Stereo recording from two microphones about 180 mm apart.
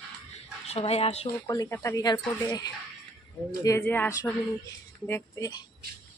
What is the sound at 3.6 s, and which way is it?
A woman's voice, 15° left (ahead or behind).